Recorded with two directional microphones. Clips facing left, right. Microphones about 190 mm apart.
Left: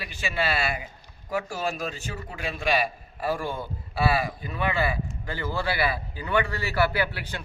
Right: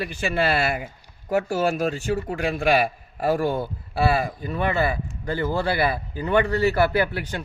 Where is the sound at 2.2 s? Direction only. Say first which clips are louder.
Right 4 dB; 55° right (ahead or behind).